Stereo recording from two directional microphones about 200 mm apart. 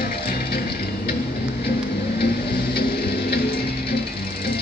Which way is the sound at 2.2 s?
50° left (ahead or behind).